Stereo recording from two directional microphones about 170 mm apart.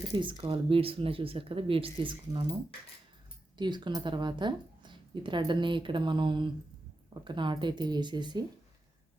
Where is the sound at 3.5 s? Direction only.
25° right (ahead or behind).